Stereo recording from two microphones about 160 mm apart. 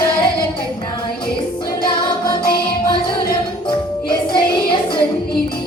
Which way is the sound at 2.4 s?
75° left (ahead or behind).